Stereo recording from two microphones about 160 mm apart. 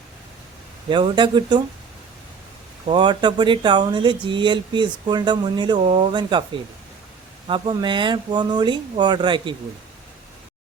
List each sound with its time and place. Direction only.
0.9 s speech: 30° right (ahead or behind)
2.8 s speech: 30° right (ahead or behind)
7.4 s speech: 30° right (ahead or behind)